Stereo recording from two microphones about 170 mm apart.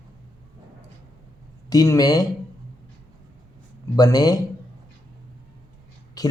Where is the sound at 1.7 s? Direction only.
20° left (ahead or behind).